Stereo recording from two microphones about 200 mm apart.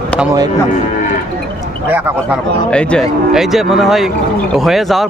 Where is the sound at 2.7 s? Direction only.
5° left (ahead or behind).